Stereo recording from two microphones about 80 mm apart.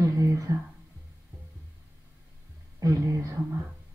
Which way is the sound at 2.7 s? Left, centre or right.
Right.